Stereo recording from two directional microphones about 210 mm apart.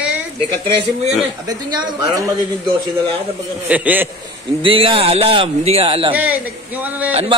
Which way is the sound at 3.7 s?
10° right (ahead or behind).